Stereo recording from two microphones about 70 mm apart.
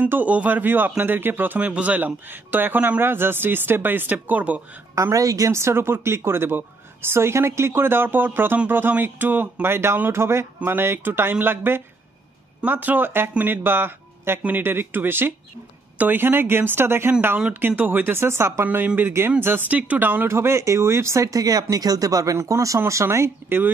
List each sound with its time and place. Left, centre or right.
0.1 s speech: right
4.9 s speech: right
5.5 s a woman's voice: right
17.4 s speech: right
18.7 s speech: right
20.2 s a woman's voice: right